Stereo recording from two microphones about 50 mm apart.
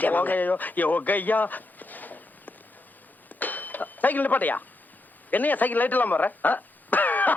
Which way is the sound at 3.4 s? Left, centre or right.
Left.